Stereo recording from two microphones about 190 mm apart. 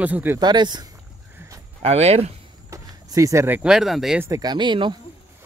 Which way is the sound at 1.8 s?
35° right (ahead or behind).